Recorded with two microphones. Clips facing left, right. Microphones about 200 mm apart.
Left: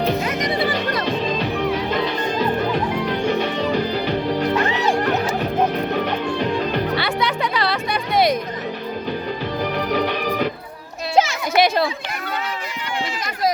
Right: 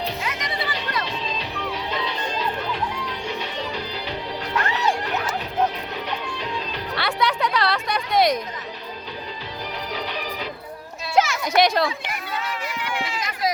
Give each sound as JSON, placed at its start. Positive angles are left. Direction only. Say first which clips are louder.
{"t": 0.0, "sound": "music", "louder": "left 8 dB", "side_deg": 50}
{"t": 4.5, "sound": "music", "louder": "left 5 dB", "side_deg": 20}
{"t": 4.9, "sound": "music", "louder": "left 7 dB", "side_deg": 50}
{"t": 6.9, "sound": "music", "louder": "left 3 dB", "side_deg": 0}
{"t": 9.7, "sound": "music", "louder": "left 8 dB", "side_deg": 55}
{"t": 11.1, "sound": "music", "louder": "left 2 dB", "side_deg": 30}
{"t": 11.5, "sound": "a sound", "louder": "left 2 dB", "side_deg": 5}